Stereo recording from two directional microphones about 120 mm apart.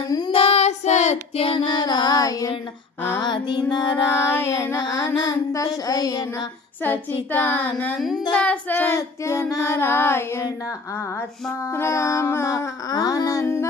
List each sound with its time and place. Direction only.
0.3 s child singing: 50° left (ahead or behind); by 1.2 s 75° left (ahead or behind)
1.4 s child singing: 45° left (ahead or behind)
3.9 s child singing: 20° left (ahead or behind)
6.8 s a woman's voice: 15° left (ahead or behind)
7.9 s child singing: centre (ahead or behind)
8.4 s child singing: 10° left (ahead or behind)
11.7 s child singing: 20° left (ahead or behind)